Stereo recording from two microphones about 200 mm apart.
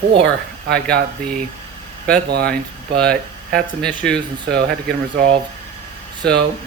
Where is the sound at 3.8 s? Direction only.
5° left (ahead or behind).